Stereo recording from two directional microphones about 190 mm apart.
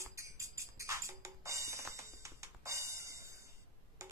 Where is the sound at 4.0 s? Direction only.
15° right (ahead or behind).